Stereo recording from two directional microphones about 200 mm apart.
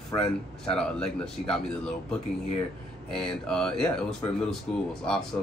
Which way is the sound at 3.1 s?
5° left (ahead or behind).